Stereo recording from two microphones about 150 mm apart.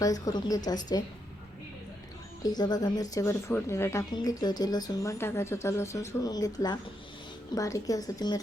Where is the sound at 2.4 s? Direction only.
25° left (ahead or behind).